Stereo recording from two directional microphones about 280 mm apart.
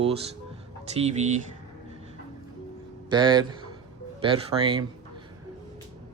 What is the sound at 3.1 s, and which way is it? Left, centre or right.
A man's voice, centre.